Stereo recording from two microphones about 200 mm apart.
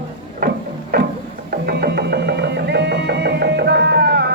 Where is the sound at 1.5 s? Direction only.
50° right (ahead or behind).